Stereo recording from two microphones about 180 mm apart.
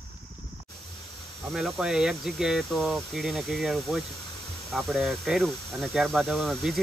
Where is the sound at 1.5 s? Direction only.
5° right (ahead or behind).